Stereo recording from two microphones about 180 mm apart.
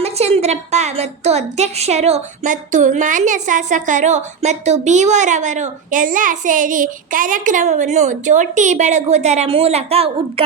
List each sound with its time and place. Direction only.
0.0 s a woman's voice: 35° right (ahead or behind)